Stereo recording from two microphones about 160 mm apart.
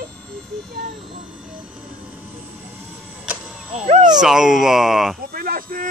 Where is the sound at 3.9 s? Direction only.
45° right (ahead or behind).